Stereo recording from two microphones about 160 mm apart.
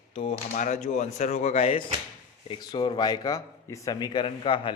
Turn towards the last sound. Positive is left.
turn(degrees=30)  # may be behind; listen again after turning